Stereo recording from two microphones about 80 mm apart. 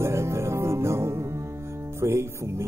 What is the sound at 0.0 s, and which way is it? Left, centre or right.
Music, right.